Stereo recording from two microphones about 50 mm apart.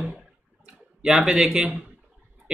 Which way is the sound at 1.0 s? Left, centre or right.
Centre.